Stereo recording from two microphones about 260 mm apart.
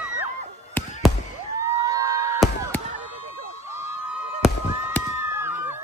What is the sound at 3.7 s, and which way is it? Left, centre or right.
Fireworks, centre.